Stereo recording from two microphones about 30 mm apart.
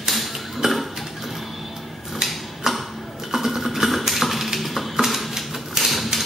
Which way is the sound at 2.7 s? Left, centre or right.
Centre.